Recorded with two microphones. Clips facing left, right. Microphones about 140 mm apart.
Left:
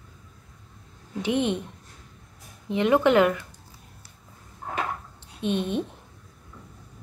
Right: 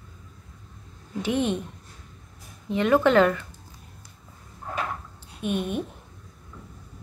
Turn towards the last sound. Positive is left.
turn(degrees=25)  # may be behind; listen again after turning